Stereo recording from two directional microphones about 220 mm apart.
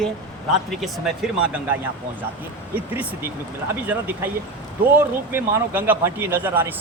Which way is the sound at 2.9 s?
10° right (ahead or behind).